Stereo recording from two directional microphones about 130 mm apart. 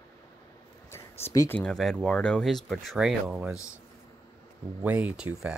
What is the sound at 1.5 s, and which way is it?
Speech, 10° left (ahead or behind).